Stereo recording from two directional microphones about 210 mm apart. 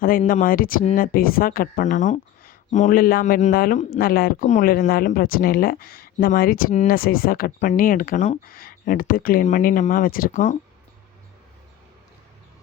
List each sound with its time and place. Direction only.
0.3 s speech: 40° left (ahead or behind)